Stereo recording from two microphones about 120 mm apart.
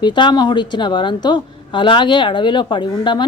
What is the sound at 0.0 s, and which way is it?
A woman's voice, 40° left (ahead or behind).